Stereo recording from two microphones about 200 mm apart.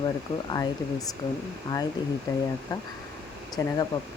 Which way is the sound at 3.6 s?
15° left (ahead or behind).